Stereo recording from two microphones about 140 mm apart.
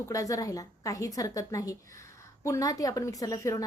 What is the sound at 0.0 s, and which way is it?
A woman's voice, 25° left (ahead or behind).